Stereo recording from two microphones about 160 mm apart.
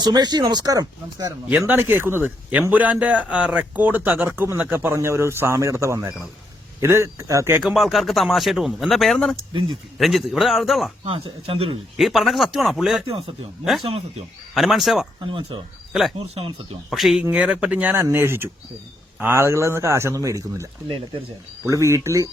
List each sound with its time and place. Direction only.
0.0 s speech: 25° right (ahead or behind)
1.5 s a man's voice: 10° right (ahead or behind)
7.6 s speech: centre (ahead or behind)
11.0 s speech: 35° right (ahead or behind)
11.9 s speech: centre (ahead or behind)
14.5 s speech: centre (ahead or behind)
15.2 s speech: 30° right (ahead or behind)
15.9 s a man's voice: centre (ahead or behind); by 20.7 s 20° right (ahead or behind)
21.7 s speech: 20° right (ahead or behind)